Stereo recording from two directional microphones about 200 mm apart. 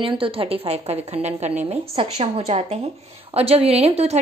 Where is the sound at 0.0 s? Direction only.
25° right (ahead or behind).